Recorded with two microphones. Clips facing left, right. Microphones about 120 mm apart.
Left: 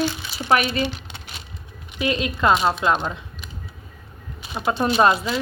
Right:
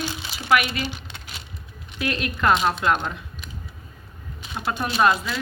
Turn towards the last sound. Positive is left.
turn(degrees=30)  # may be behind; listen again after turning